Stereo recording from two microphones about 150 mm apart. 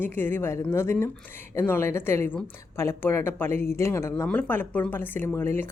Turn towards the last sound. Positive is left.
turn(degrees=15)  # may be behind; listen again after turning